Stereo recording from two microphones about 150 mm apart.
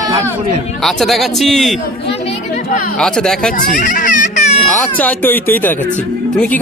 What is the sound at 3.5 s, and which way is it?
A child's voice, 60° left (ahead or behind).